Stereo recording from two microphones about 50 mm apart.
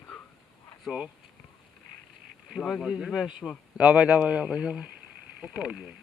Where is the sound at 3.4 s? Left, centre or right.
Centre.